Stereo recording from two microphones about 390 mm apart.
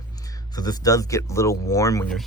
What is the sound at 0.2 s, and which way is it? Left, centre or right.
Speech, centre.